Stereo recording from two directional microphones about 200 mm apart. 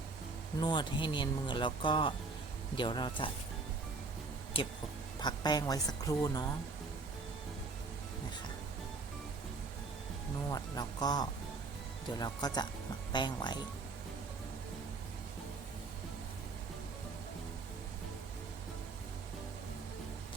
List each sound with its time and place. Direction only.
0.6 s speech: 20° left (ahead or behind)
5.2 s speech: 20° left (ahead or behind)
10.5 s speech: 20° left (ahead or behind)